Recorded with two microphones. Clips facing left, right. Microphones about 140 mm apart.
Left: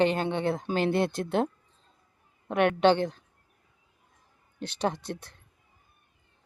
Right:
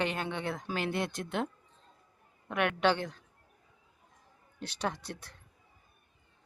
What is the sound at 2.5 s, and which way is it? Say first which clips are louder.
Speech: left 6 dB; 30° left (ahead or behind).